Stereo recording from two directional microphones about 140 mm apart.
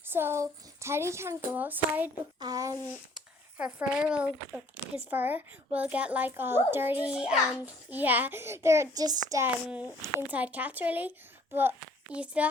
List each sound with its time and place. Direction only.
0.1 s a child's voice: 15° right (ahead or behind)
2.4 s speech: 25° right (ahead or behind)
2.9 s a child's voice: 10° right (ahead or behind); by 9.4 s 30° right (ahead or behind)
10.0 s a child's voice: 15° right (ahead or behind)
12.1 s a child's voice: 10° right (ahead or behind)